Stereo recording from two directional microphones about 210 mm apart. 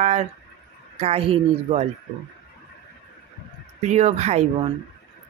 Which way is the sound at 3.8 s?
30° right (ahead or behind).